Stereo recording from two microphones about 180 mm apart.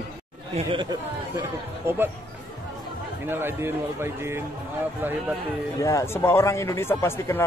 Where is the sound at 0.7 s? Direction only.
25° right (ahead or behind).